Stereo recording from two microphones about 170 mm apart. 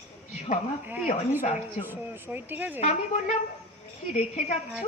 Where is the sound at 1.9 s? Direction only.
10° right (ahead or behind).